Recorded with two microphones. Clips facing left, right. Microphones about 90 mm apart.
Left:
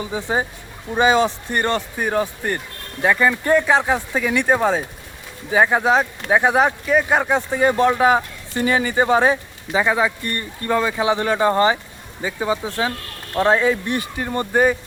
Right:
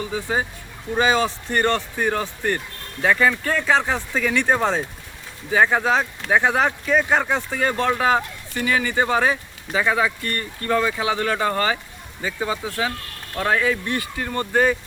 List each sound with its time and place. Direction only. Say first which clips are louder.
0.0 s speech: left 2 dB; 20° left (ahead or behind)
8.5 s speech: left 3 dB; 30° left (ahead or behind)